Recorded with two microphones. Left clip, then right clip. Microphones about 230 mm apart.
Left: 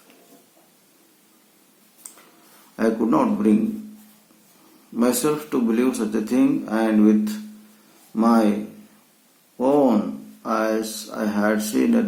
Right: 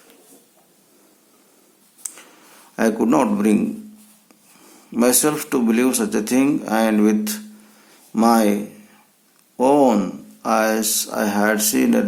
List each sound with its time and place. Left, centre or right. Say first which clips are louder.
2.7 s speech: right 3 dB; right
4.9 s speech: right 3 dB; right
9.6 s a sound: right 3 dB; right
10.4 s speech: right 4 dB; right